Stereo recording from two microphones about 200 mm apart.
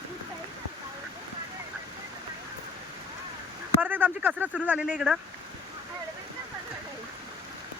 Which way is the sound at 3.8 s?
10° right (ahead or behind).